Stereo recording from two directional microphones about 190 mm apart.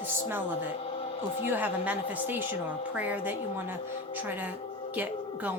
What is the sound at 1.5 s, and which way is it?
Speech, 10° right (ahead or behind).